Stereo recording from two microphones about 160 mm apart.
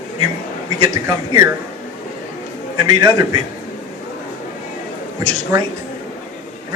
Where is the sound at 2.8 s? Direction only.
25° right (ahead or behind).